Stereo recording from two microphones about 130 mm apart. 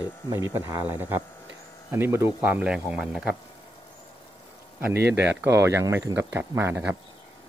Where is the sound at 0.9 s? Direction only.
15° right (ahead or behind).